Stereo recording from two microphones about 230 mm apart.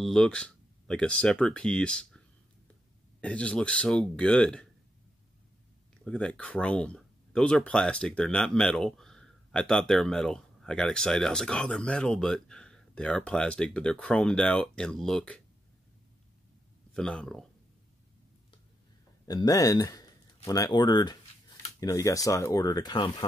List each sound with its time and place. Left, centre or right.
0.0 s speech: centre
6.0 s speech: centre
16.9 s speech: centre
19.2 s speech: centre